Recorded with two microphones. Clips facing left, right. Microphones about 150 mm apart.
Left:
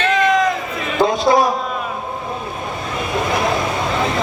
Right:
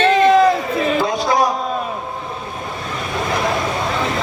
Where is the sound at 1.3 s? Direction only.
25° left (ahead or behind).